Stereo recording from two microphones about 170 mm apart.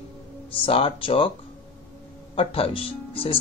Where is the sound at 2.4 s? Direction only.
35° left (ahead or behind).